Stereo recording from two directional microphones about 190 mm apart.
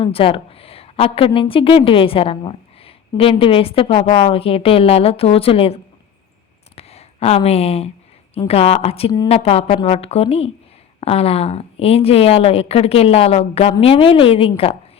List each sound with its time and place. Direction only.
0.0 s a woman's voice: 30° left (ahead or behind)
6.7 s a sound: 30° left (ahead or behind)
8.4 s speech: 30° left (ahead or behind)